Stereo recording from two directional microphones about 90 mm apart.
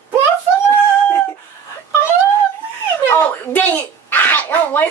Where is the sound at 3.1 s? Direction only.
20° left (ahead or behind).